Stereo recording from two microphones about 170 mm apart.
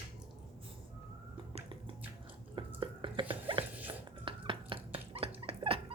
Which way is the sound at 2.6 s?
30° right (ahead or behind).